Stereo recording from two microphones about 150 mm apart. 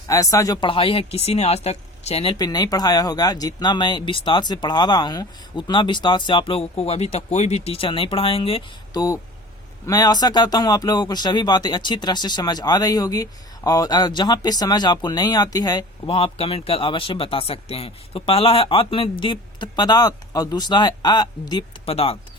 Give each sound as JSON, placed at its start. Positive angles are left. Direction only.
{"t": 0.1, "sound": "speech", "side_deg": 20}
{"t": 2.4, "sound": "speech", "side_deg": 25}
{"t": 8.9, "sound": "speech", "side_deg": 25}
{"t": 21.8, "sound": "speech", "side_deg": 40}